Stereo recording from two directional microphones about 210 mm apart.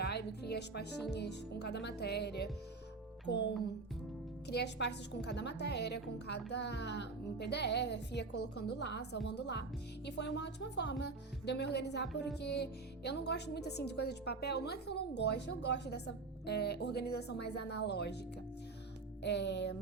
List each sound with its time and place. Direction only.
0.0 s speech: 50° left (ahead or behind)
4.4 s speech: 55° left (ahead or behind)
19.2 s speech: 55° left (ahead or behind)